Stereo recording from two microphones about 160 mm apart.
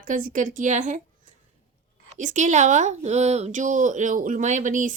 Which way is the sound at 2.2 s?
50° right (ahead or behind).